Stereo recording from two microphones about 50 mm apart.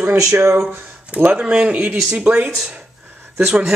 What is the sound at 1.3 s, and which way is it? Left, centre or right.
Speech, centre.